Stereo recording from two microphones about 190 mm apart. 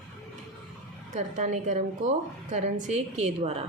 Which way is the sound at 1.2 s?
40° right (ahead or behind).